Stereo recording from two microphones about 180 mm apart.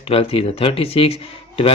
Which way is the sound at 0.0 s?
30° left (ahead or behind).